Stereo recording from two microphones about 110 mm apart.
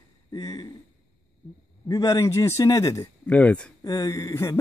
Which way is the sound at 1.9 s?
35° left (ahead or behind).